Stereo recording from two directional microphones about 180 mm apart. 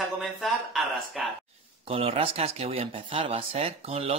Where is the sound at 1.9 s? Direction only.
35° right (ahead or behind).